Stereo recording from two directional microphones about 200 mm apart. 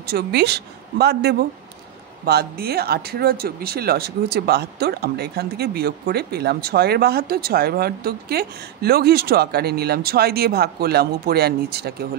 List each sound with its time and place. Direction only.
0.0 s speech: 55° right (ahead or behind)